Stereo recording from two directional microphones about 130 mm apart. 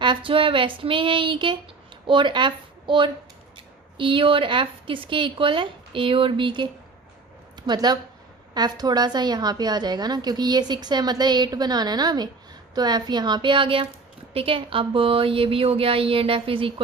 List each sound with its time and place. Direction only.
0.0 s a woman's voice: 40° right (ahead or behind)
7.7 s a woman's voice: 30° right (ahead or behind)